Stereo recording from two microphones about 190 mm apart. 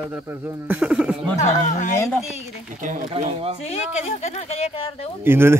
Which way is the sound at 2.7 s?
45° right (ahead or behind).